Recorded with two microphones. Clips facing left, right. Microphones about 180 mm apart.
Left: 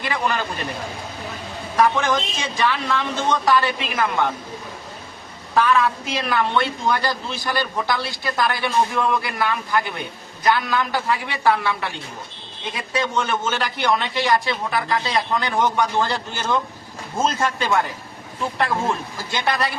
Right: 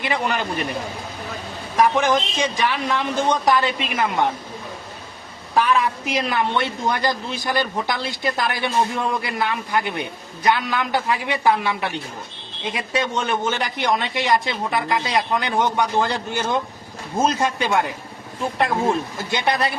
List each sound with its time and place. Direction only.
0.0 s a man's voice: 20° right (ahead or behind)
1.7 s a woman's voice: 15° right (ahead or behind)
5.5 s a man's voice: 15° right (ahead or behind)
19.3 s a man's voice: 20° right (ahead or behind)